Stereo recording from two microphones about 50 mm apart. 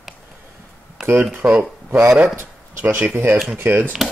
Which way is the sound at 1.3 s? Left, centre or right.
Right.